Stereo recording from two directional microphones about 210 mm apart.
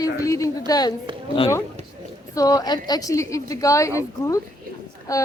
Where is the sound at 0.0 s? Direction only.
15° left (ahead or behind).